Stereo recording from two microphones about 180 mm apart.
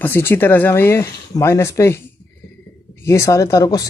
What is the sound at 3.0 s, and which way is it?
Speech, 15° left (ahead or behind).